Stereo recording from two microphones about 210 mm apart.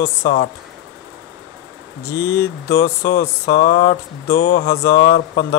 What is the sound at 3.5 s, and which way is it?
Speech, 50° left (ahead or behind).